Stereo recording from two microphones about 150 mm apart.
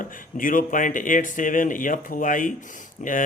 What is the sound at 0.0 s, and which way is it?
Speech, 65° left (ahead or behind).